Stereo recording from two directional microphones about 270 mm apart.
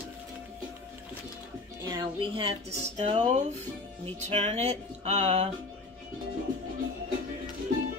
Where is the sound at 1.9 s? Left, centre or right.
Centre.